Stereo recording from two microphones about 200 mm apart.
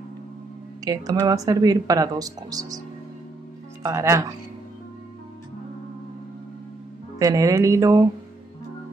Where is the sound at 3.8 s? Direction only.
15° right (ahead or behind).